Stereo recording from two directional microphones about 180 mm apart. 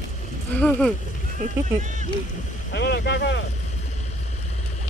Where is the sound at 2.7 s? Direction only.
70° left (ahead or behind).